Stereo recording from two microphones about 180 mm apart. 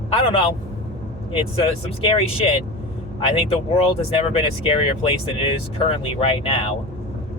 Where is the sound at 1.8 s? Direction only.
30° left (ahead or behind).